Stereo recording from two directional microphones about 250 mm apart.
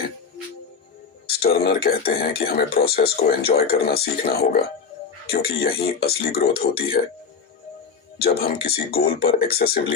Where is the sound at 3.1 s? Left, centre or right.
Left.